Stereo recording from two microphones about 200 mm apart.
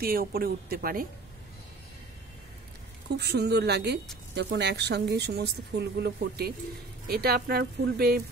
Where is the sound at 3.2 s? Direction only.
55° right (ahead or behind).